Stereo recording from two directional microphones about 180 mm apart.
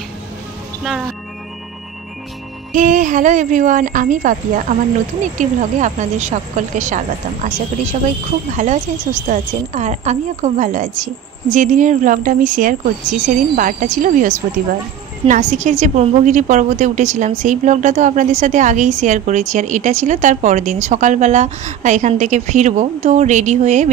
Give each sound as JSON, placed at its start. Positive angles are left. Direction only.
{"t": 2.7, "sound": "a woman's voice", "side_deg": -45}
{"t": 8.5, "sound": "a woman's voice", "side_deg": -40}